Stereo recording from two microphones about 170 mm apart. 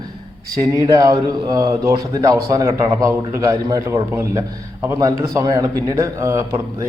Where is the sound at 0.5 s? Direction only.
20° right (ahead or behind).